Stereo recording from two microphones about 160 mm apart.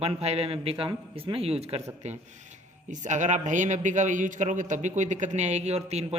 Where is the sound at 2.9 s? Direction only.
50° right (ahead or behind).